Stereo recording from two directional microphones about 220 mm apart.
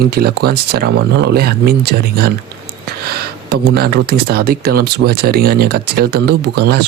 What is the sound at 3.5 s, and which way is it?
Speech, 45° right (ahead or behind).